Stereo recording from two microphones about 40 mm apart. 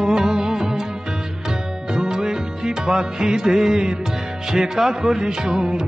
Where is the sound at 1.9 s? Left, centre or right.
Centre.